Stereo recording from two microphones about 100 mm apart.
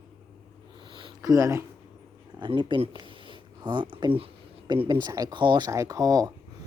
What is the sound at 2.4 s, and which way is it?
Speech, 50° right (ahead or behind).